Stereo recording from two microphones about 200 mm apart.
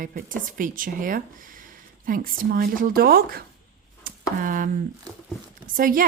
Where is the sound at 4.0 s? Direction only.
45° right (ahead or behind).